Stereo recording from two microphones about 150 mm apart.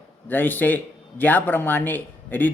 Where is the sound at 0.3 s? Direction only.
10° left (ahead or behind).